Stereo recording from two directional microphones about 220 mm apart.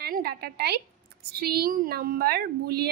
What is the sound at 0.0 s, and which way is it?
A woman's voice, 45° right (ahead or behind).